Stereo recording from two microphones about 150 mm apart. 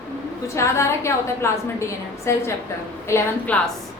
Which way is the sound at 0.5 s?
20° left (ahead or behind).